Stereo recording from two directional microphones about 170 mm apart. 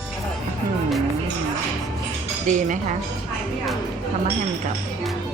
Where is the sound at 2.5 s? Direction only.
50° right (ahead or behind).